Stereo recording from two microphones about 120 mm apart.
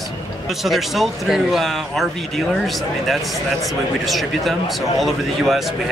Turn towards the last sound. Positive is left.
turn(degrees=0)  # may be behind; listen again after turning